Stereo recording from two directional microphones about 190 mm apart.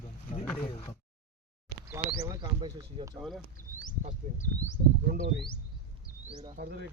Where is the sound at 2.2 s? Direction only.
20° right (ahead or behind).